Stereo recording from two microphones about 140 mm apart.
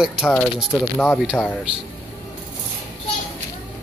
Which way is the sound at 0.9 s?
5° left (ahead or behind).